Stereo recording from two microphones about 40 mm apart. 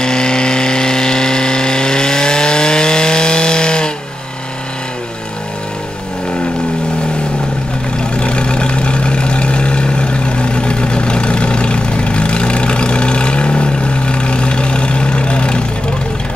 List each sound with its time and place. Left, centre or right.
0.0 s vehicle: centre
8.1 s vehicle: left